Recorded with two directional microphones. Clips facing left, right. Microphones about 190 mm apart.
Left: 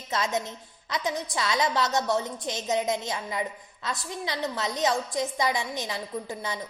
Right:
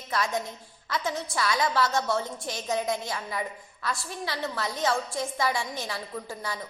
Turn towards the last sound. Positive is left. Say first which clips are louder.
# left 2 dB
turn(degrees=20)  # may be behind; listen again after turning